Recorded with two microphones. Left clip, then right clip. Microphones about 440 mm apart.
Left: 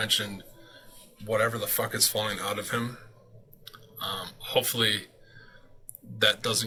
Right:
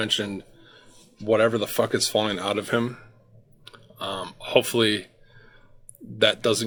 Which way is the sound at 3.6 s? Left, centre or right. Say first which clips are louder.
Right 3 dB; centre.